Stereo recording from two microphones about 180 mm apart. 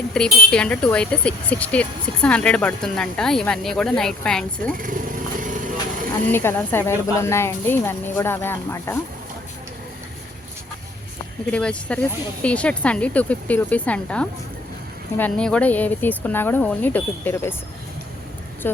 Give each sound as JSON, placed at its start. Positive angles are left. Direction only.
{"t": 0.1, "sound": "speech", "side_deg": 5}
{"t": 5.4, "sound": "vehicle", "side_deg": -45}
{"t": 6.2, "sound": "speech", "side_deg": 10}
{"t": 11.5, "sound": "speech", "side_deg": 5}
{"t": 18.6, "sound": "speech", "side_deg": 10}